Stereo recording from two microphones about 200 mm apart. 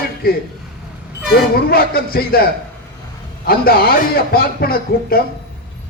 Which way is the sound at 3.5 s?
50° left (ahead or behind).